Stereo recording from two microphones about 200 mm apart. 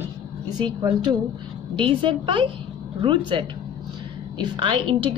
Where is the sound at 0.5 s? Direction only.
20° right (ahead or behind).